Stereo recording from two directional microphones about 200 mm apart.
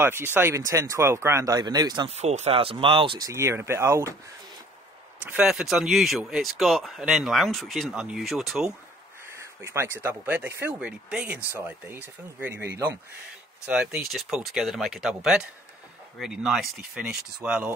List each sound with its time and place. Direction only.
0.0 s speech: 10° right (ahead or behind)
2.1 s speech: 30° right (ahead or behind); by 4.1 s 10° right (ahead or behind)
5.2 s speech: 5° right (ahead or behind)
9.3 s speech: 10° right (ahead or behind)